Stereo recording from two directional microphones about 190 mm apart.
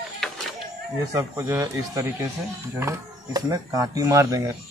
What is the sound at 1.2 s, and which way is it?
Speech, 15° right (ahead or behind).